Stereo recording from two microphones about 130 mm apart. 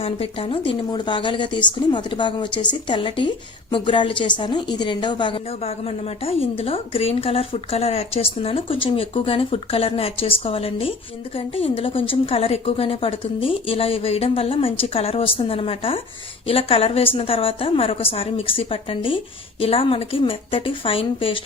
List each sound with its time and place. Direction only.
0.0 s a woman's voice: 45° left (ahead or behind)